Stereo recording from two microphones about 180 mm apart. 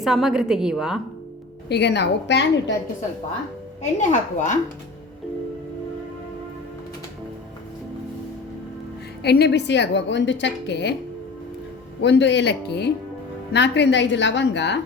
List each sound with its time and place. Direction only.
0.0 s a woman's voice: centre (ahead or behind)
1.7 s a woman's voice: 70° left (ahead or behind)
4.1 s speech: 45° left (ahead or behind)
9.2 s a woman's voice: 65° left (ahead or behind)
12.0 s a woman's voice: 75° left (ahead or behind)